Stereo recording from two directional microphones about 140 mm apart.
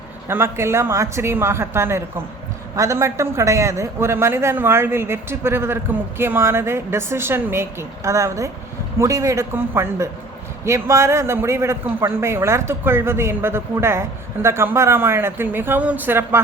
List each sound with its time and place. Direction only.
0.3 s a man's voice: 15° right (ahead or behind)